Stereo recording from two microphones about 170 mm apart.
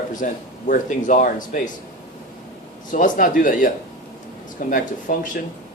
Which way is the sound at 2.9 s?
50° left (ahead or behind).